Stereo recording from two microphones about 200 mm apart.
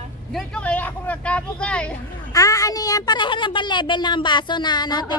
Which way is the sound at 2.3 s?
15° left (ahead or behind).